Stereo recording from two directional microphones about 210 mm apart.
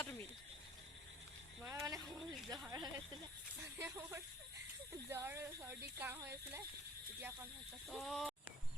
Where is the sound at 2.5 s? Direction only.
20° right (ahead or behind).